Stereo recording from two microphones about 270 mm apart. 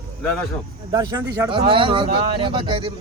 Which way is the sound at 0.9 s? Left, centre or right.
Centre.